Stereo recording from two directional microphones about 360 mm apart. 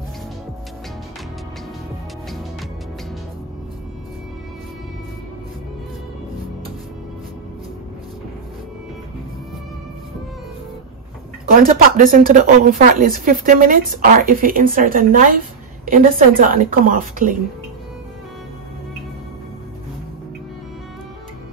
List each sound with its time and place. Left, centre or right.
11.5 s speech: right